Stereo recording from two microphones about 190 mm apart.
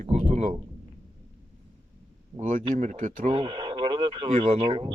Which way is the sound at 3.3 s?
25° right (ahead or behind).